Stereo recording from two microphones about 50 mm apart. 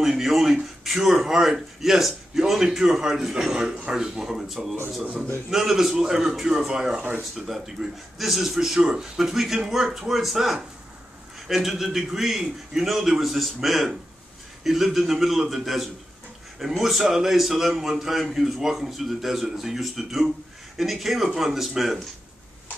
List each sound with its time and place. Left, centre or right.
0.0 s a man's voice: centre